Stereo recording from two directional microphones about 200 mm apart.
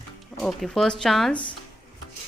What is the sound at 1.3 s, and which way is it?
Speech, 25° left (ahead or behind).